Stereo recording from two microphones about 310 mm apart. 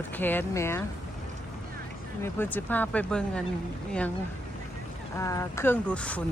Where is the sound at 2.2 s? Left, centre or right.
Centre.